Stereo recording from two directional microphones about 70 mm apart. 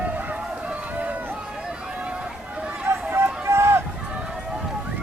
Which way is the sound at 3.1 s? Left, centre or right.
Right.